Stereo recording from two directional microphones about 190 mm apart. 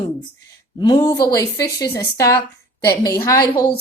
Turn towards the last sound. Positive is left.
turn(degrees=20)  # may be behind; listen again after turning